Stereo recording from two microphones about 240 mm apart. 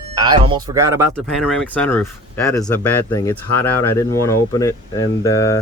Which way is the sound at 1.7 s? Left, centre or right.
Centre.